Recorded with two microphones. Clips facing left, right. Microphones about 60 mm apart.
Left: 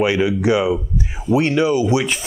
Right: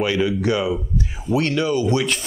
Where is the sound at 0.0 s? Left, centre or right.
Centre.